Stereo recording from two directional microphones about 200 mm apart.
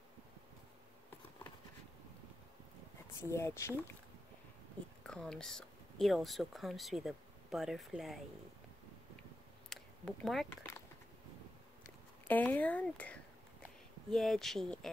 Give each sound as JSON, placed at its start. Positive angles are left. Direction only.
{"t": 3.2, "sound": "speech", "side_deg": 15}
{"t": 5.0, "sound": "speech", "side_deg": 5}
{"t": 9.7, "sound": "a sound", "side_deg": 0}
{"t": 12.3, "sound": "speech", "side_deg": 10}